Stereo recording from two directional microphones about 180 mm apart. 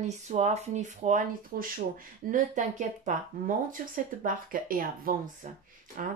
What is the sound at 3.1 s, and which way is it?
Speech, 50° right (ahead or behind).